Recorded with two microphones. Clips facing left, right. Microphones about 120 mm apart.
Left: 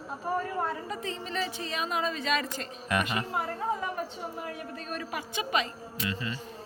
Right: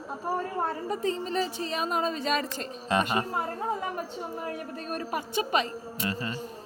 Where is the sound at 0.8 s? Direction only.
40° right (ahead or behind).